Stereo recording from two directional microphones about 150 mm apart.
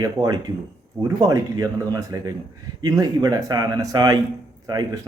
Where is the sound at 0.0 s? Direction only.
25° right (ahead or behind).